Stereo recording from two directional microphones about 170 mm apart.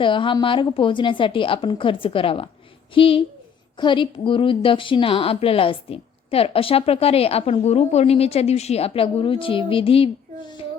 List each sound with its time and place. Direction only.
0.0 s a woman's voice: 30° left (ahead or behind)